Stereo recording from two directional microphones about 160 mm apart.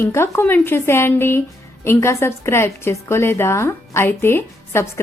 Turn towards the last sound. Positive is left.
turn(degrees=15)  # may be behind; listen again after turning